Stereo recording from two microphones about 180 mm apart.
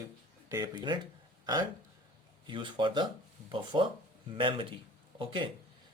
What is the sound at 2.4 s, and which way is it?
Speech, 25° right (ahead or behind).